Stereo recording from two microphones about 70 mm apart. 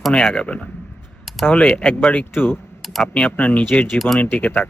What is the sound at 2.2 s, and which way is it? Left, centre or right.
Speech, left.